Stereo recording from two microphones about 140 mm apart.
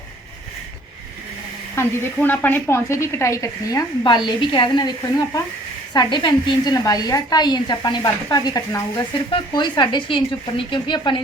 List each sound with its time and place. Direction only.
1.7 s a woman's voice: 15° left (ahead or behind); by 11.2 s 35° left (ahead or behind)